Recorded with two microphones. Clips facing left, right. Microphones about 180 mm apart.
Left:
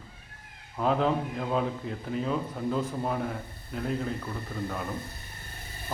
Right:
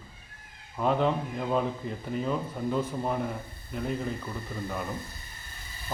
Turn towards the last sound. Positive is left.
turn(degrees=55)  # may be behind; listen again after turning